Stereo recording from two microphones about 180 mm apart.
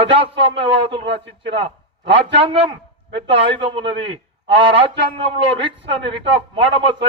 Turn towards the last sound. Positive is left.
turn(degrees=-30)  # may be behind; listen again after turning